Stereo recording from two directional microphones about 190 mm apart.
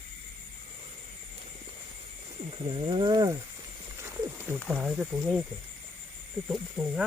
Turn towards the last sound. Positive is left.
turn(degrees=0)  # may be behind; listen again after turning